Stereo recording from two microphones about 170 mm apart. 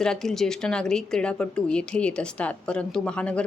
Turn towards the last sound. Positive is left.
turn(degrees=5)  # may be behind; listen again after turning